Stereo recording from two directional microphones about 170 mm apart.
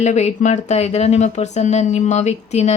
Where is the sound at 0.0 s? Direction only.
45° left (ahead or behind).